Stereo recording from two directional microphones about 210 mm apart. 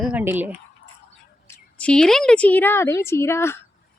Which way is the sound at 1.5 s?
5° left (ahead or behind).